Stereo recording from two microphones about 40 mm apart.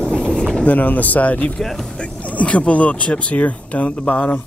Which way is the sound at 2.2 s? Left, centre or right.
Left.